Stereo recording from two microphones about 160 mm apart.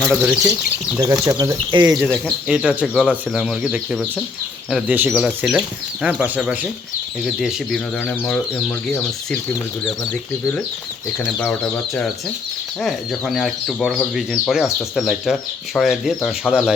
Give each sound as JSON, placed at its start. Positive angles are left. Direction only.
{"t": 0.1, "sound": "speech", "side_deg": -5}
{"t": 0.9, "sound": "speech", "side_deg": -20}
{"t": 2.2, "sound": "speech", "side_deg": -5}
{"t": 8.0, "sound": "speech", "side_deg": 10}
{"t": 11.3, "sound": "speech", "side_deg": 10}